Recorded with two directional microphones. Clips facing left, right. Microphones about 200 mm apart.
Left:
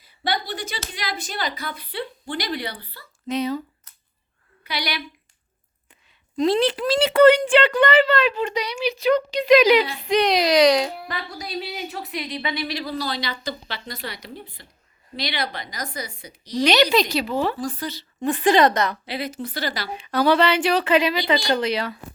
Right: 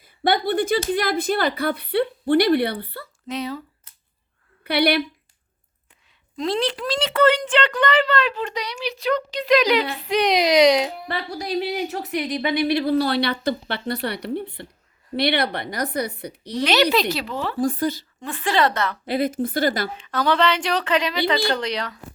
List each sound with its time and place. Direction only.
0.0 s speech: 55° right (ahead or behind)
3.2 s a child's voice: centre (ahead or behind)
4.6 s speech: 60° right (ahead or behind)
6.3 s a child's voice: centre (ahead or behind)
10.2 s speech: 20° right (ahead or behind)
11.1 s speech: 35° right (ahead or behind); by 16.6 s 60° right (ahead or behind)
16.9 s a child's voice: 5° right (ahead or behind)
17.3 s a woman's voice: 15° left (ahead or behind)
17.6 s a woman's voice: 50° right (ahead or behind)
18.2 s a woman's voice: 15° left (ahead or behind)
19.0 s a woman's voice: 50° right (ahead or behind)
19.9 s a woman's voice: 10° left (ahead or behind)